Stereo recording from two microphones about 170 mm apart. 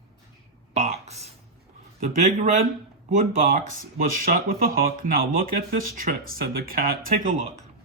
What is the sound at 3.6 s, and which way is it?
Speech, 55° right (ahead or behind).